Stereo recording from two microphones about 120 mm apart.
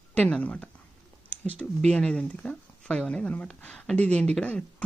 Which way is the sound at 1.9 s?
10° left (ahead or behind).